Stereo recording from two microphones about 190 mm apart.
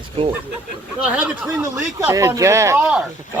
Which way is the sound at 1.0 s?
10° right (ahead or behind).